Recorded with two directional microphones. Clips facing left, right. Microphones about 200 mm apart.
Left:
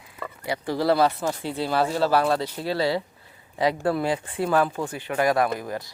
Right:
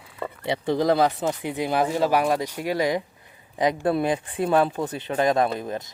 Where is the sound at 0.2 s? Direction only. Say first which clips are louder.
Right 3 dB; 25° right (ahead or behind).